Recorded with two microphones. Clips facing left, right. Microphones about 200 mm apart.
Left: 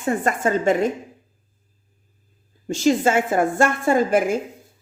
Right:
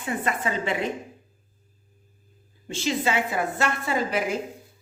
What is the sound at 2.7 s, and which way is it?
A woman's voice, 45° left (ahead or behind).